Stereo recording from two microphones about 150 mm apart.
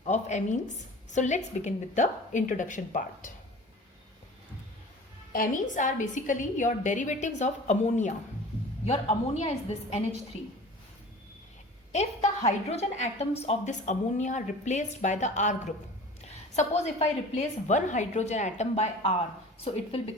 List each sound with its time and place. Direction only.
0.0 s a woman's voice: 50° left (ahead or behind)
5.3 s a woman's voice: 60° left (ahead or behind)
11.9 s a woman's voice: 45° left (ahead or behind)